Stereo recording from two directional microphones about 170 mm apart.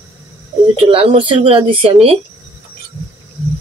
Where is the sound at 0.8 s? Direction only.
30° right (ahead or behind).